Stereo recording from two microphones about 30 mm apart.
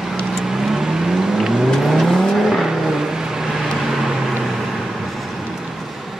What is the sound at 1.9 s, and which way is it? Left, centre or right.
Vehicle, centre.